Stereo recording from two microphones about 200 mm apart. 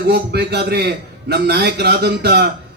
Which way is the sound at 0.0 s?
55° right (ahead or behind).